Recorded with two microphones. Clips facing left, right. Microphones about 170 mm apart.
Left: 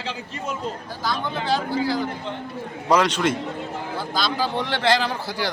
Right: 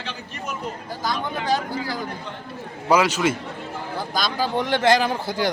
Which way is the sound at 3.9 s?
15° right (ahead or behind).